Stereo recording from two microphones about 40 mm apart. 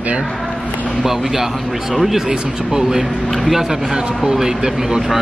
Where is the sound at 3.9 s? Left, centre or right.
Centre.